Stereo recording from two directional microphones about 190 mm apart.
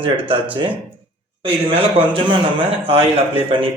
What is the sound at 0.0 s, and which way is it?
Speech, 25° right (ahead or behind).